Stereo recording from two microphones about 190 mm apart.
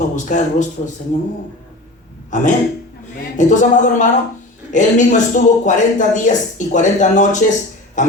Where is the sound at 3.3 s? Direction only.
40° left (ahead or behind).